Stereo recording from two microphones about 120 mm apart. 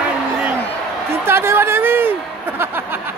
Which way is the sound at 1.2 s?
20° right (ahead or behind).